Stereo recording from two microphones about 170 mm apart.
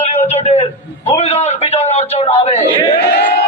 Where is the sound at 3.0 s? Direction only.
75° left (ahead or behind).